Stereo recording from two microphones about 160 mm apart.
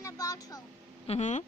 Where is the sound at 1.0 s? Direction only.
45° left (ahead or behind).